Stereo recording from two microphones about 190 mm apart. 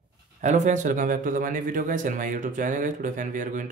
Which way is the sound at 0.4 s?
40° right (ahead or behind).